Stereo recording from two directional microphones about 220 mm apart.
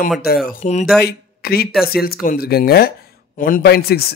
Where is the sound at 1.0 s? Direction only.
45° left (ahead or behind).